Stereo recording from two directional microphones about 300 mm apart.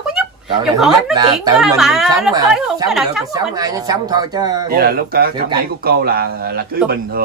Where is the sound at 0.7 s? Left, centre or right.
Centre.